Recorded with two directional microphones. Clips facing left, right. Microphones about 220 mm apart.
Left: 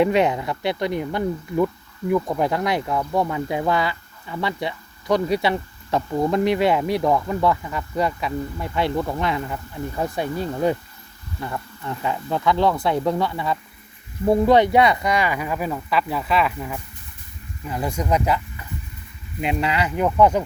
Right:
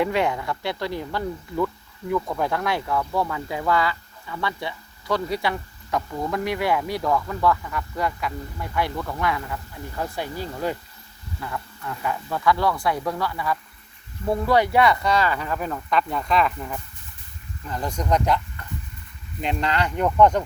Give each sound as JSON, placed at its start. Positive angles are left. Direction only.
{"t": 0.0, "sound": "speech", "side_deg": 20}